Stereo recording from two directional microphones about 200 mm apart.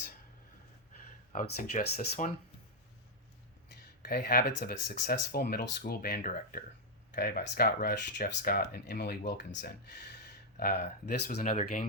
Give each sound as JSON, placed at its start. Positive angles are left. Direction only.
{"t": 1.3, "sound": "speech", "side_deg": 40}
{"t": 4.1, "sound": "speech", "side_deg": 50}
{"t": 11.3, "sound": "speech", "side_deg": 35}
{"t": 11.6, "sound": "speech", "side_deg": 45}